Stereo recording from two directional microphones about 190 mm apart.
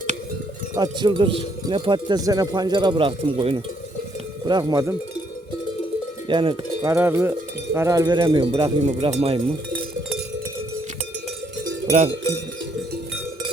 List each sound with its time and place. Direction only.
0.8 s cowbell: 25° right (ahead or behind)
6.2 s cowbell: 25° right (ahead or behind)